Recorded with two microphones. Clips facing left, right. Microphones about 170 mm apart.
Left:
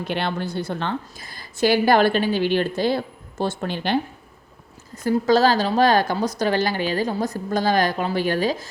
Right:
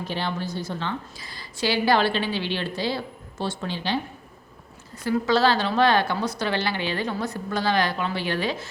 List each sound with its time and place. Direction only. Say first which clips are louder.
0.0 s a woman's voice: left 4 dB; 65° left (ahead or behind)
5.0 s speech: left 4 dB; 40° left (ahead or behind)